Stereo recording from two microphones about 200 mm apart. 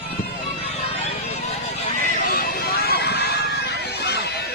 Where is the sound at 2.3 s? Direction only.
45° left (ahead or behind).